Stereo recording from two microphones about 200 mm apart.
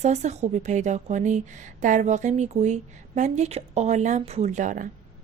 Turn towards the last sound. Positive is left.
turn(degrees=-40)  # may be behind; listen again after turning